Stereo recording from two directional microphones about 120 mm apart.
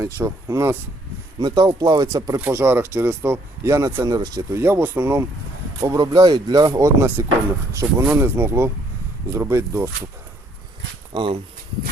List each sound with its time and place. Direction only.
0.0 s speech: 25° right (ahead or behind)
1.4 s speech: 35° right (ahead or behind)
4.6 s speech: 20° right (ahead or behind)
11.1 s speech: 45° right (ahead or behind)